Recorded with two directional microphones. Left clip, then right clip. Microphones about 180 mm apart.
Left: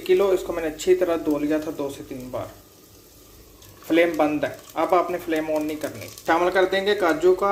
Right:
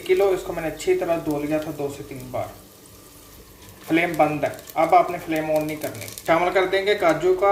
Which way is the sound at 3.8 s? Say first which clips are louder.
Even; 40° left (ahead or behind).